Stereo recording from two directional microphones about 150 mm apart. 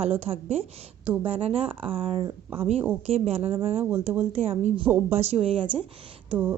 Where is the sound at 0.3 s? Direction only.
45° right (ahead or behind).